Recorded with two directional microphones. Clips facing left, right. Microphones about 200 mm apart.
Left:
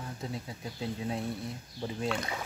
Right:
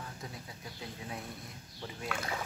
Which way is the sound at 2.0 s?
5° right (ahead or behind).